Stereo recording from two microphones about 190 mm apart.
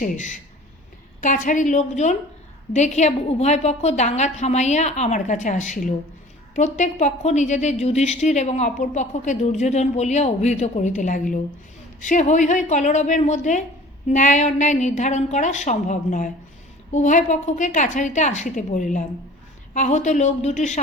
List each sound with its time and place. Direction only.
0.0 s a woman's voice: 40° left (ahead or behind)